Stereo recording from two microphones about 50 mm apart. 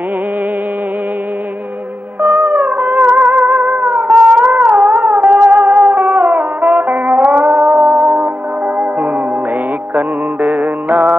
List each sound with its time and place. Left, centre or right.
2.2 s music: right